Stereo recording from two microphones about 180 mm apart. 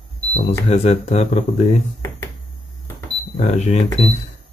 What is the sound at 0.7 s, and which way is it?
Speech, 35° left (ahead or behind).